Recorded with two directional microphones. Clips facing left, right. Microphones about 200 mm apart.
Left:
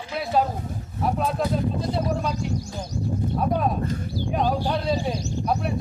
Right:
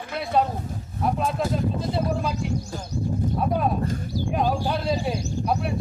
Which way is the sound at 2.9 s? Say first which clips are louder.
Right 1 dB; 35° right (ahead or behind).